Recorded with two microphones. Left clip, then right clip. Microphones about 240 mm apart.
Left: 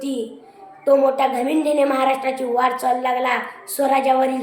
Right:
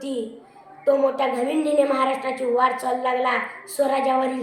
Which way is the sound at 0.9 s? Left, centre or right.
Centre.